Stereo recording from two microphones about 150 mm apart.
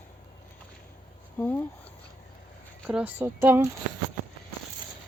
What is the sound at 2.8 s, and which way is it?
Speech, 10° right (ahead or behind).